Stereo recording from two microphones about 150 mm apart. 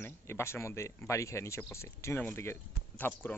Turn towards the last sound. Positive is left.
turn(degrees=15)  # may be behind; listen again after turning